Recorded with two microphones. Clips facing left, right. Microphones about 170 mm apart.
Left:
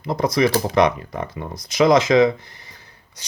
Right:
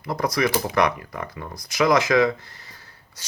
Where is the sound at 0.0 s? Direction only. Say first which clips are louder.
Left 4 dB; 20° left (ahead or behind).